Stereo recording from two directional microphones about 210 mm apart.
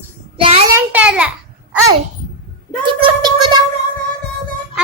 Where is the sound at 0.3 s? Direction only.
25° right (ahead or behind).